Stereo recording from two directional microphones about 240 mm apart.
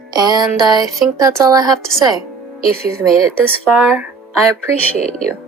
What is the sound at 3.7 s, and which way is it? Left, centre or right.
Speech, centre.